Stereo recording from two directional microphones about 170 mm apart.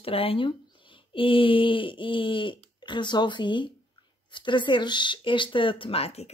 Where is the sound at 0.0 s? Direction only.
35° left (ahead or behind).